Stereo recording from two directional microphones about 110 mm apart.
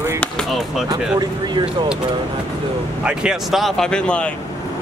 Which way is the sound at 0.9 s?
40° right (ahead or behind).